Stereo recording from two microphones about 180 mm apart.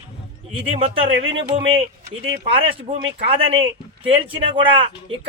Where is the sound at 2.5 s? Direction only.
30° right (ahead or behind).